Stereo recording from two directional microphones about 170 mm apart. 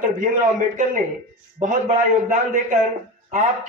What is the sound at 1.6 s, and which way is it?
A man's voice, 50° right (ahead or behind).